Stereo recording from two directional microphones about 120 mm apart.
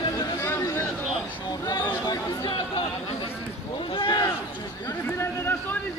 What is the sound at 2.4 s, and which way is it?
Speech, 45° left (ahead or behind).